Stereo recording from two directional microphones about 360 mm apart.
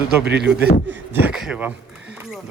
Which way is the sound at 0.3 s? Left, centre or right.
Right.